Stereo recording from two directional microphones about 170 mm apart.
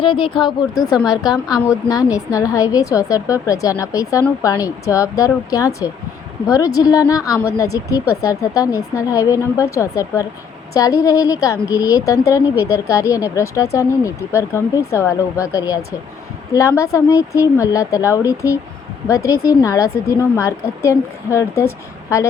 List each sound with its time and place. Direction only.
0.0 s a woman's voice: 30° left (ahead or behind)